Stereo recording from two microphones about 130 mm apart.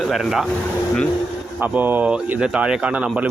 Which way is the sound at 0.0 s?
Centre (ahead or behind).